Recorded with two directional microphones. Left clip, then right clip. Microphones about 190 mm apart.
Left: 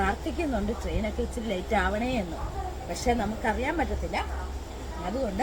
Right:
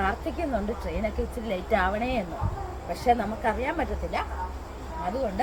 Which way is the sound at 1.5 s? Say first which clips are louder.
Right 2 dB; centre (ahead or behind).